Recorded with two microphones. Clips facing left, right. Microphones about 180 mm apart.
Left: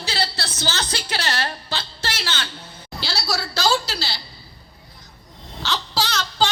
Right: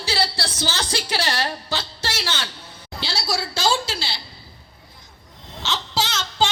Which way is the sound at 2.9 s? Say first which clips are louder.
Even; 25° right (ahead or behind).